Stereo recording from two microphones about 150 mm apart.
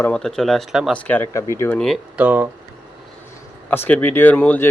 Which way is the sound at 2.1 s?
10° right (ahead or behind).